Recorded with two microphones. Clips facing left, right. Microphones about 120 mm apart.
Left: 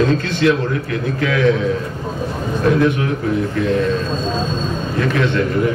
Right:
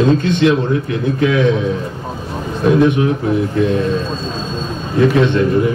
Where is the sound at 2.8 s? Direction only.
20° right (ahead or behind).